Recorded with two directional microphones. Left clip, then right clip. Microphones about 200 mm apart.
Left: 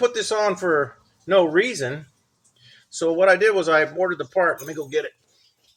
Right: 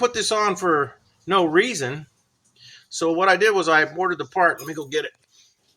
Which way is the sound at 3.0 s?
15° right (ahead or behind).